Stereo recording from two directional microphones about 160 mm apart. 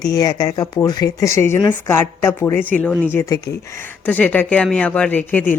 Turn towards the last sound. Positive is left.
turn(degrees=10)  # may be behind; listen again after turning